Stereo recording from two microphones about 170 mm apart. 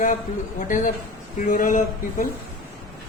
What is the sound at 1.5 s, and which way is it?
Speech, 50° left (ahead or behind).